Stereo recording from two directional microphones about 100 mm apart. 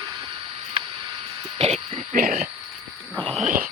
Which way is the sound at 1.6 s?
90° right.